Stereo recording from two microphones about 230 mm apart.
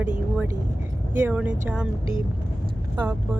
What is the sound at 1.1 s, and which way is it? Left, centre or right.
Speech, centre.